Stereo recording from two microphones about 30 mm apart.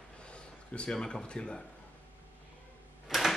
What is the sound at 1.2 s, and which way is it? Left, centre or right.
Speech, left.